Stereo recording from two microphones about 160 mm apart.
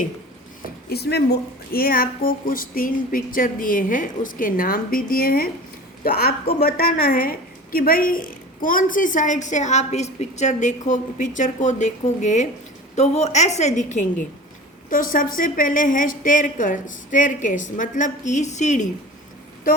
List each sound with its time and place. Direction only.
0.9 s a woman's voice: 85° left; by 14.1 s 50° left (ahead or behind)
14.8 s speech: 60° left (ahead or behind)